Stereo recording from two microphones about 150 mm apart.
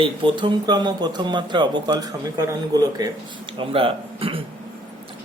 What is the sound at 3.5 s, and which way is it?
Speech, 35° right (ahead or behind).